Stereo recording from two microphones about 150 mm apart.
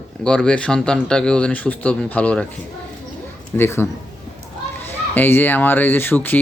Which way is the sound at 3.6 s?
15° left (ahead or behind).